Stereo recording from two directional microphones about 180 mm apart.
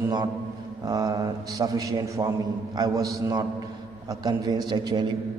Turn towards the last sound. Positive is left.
turn(degrees=-25)  # may be behind; listen again after turning